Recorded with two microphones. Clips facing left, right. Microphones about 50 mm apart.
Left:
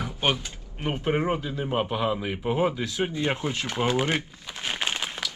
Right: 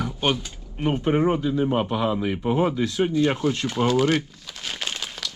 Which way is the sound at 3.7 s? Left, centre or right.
Left.